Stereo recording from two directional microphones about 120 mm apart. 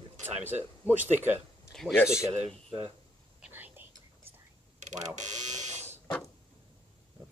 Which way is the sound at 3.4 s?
15° right (ahead or behind).